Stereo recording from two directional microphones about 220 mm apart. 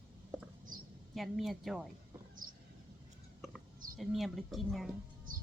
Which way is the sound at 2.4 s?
40° right (ahead or behind).